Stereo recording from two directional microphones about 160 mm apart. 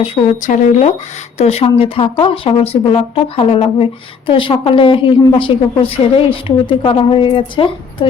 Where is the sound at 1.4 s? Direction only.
40° left (ahead or behind).